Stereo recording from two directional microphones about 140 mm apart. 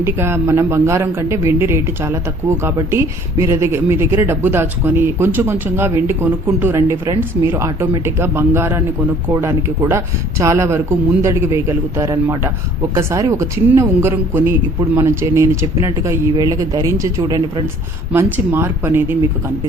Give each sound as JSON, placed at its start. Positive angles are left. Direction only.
{"t": 0.0, "sound": "speech", "side_deg": -20}